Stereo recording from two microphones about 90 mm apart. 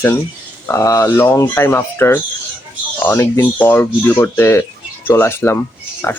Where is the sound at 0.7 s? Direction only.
40° left (ahead or behind).